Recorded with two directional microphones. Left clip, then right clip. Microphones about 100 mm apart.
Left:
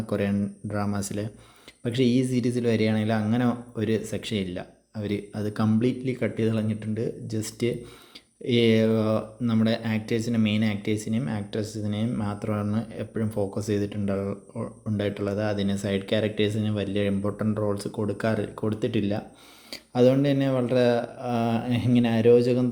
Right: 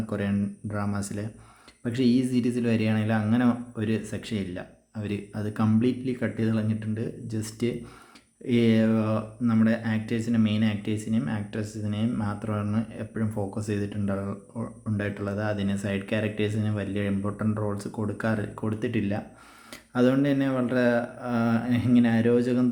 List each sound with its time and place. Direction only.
0.1 s speech: 30° left (ahead or behind)